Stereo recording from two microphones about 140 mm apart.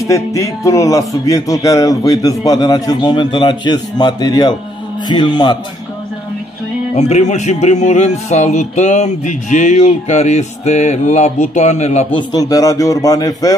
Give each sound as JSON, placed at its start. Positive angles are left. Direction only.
{"t": 0.0, "sound": "a man's voice", "side_deg": 20}
{"t": 7.0, "sound": "speech", "side_deg": 55}
{"t": 12.1, "sound": "speech", "side_deg": 30}